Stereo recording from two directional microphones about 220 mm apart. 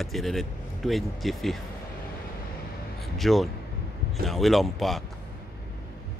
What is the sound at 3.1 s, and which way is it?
Speech, centre (ahead or behind).